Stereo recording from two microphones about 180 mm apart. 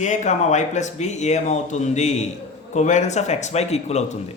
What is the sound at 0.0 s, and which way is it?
A man's voice, 40° left (ahead or behind).